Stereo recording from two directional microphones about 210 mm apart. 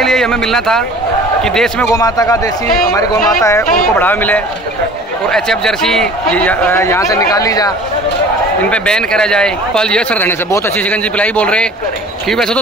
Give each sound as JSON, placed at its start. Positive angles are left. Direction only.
{"t": 0.0, "sound": "a man's voice", "side_deg": 0}
{"t": 2.0, "sound": "a man's voice", "side_deg": 15}
{"t": 8.6, "sound": "a man's voice", "side_deg": 5}